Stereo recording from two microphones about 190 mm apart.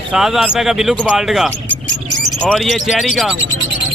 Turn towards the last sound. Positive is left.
turn(degrees=0)  # may be behind; listen again after turning